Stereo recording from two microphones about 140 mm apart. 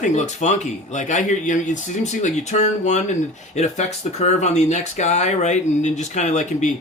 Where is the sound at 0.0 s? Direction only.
55° left (ahead or behind).